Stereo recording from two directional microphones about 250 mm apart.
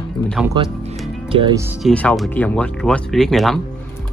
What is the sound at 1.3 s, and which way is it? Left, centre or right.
Speech, centre.